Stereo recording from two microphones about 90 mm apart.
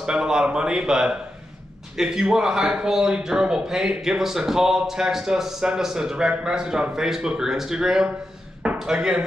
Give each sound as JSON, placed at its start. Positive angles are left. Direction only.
{"t": 0.0, "sound": "speech", "side_deg": -10}